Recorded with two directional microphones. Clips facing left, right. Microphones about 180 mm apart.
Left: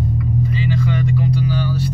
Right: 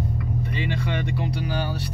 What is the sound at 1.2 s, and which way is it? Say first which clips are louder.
Speech: left 7 dB; 65° right (ahead or behind).